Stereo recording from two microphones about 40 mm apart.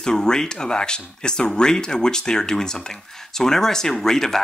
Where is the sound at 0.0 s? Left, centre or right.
Centre.